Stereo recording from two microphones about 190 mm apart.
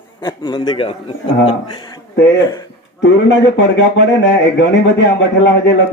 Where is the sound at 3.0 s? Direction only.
70° left (ahead or behind).